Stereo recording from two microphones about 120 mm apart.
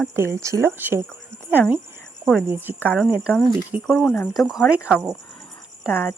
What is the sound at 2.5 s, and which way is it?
Speech, 15° right (ahead or behind).